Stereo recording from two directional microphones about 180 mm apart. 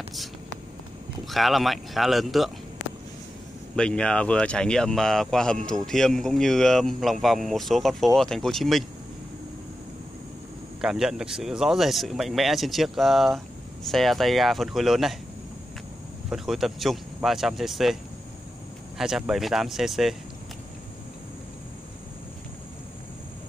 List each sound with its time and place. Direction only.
1.3 s speech: centre (ahead or behind)
3.7 s speech: 5° left (ahead or behind)
10.8 s speech: 5° right (ahead or behind)
16.3 s speech: centre (ahead or behind)
18.9 s speech: centre (ahead or behind)